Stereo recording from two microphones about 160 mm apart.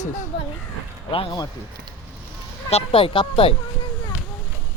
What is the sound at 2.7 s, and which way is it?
Speech, 35° left (ahead or behind).